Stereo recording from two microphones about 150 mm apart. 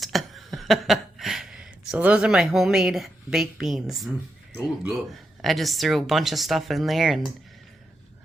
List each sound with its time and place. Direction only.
0.0 s a sound: centre (ahead or behind)
4.5 s speech: 15° right (ahead or behind)
5.1 s speech: centre (ahead or behind)